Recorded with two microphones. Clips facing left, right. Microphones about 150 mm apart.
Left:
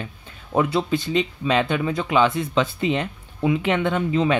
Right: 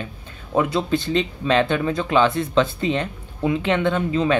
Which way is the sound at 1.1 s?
10° left (ahead or behind).